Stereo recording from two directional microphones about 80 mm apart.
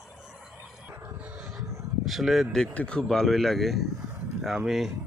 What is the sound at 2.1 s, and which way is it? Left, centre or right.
Speech, centre.